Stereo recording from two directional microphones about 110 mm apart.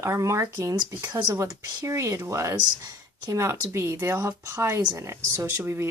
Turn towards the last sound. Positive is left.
turn(degrees=-25)  # may be behind; listen again after turning